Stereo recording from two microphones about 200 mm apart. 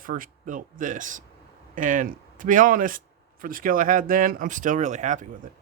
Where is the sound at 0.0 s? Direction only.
45° right (ahead or behind).